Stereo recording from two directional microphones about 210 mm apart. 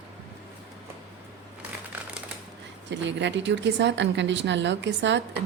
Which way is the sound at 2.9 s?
60° right (ahead or behind).